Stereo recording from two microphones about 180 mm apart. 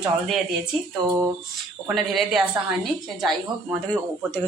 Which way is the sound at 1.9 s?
Centre (ahead or behind).